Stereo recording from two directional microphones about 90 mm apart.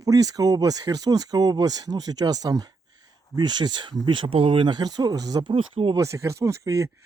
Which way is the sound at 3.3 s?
55° right (ahead or behind).